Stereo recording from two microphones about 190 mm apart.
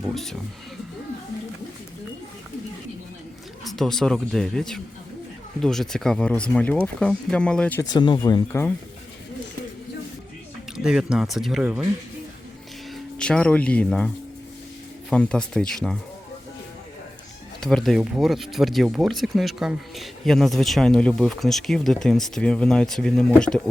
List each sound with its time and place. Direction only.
0.1 s speech: centre (ahead or behind)
3.6 s speech: centre (ahead or behind)
7.9 s speech: 25° left (ahead or behind)
10.8 s speech: 5° right (ahead or behind)
13.1 s speech: 5° left (ahead or behind)
15.1 s speech: 5° left (ahead or behind)
17.6 s speech: 5° left (ahead or behind)